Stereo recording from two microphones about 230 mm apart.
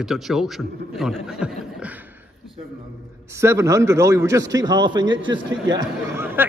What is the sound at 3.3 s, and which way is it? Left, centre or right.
A man's voice, centre.